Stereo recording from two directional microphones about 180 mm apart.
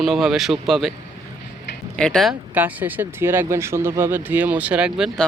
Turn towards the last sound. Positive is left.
turn(degrees=-5)  # may be behind; listen again after turning